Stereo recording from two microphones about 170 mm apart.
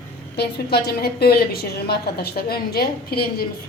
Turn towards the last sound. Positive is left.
turn(degrees=65)  # may be behind; listen again after turning